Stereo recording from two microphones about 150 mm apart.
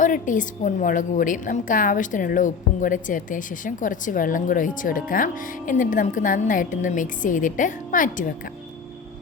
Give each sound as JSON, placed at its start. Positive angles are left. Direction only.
{"t": 0.0, "sound": "a woman's voice", "side_deg": 60}